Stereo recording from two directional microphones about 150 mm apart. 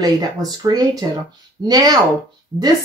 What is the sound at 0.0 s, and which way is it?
Speech, 25° right (ahead or behind).